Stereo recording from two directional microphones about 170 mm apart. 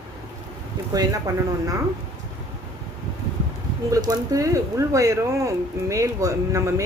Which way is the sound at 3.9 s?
20° right (ahead or behind).